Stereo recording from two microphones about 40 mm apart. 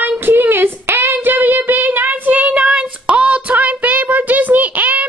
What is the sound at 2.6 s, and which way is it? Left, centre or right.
Child singing, right.